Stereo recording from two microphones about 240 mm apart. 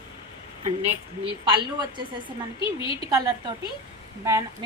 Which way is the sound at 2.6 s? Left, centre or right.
Left.